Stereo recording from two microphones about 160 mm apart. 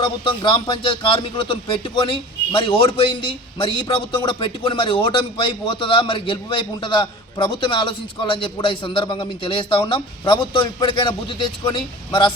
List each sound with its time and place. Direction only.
0.0 s a man's voice: 30° left (ahead or behind)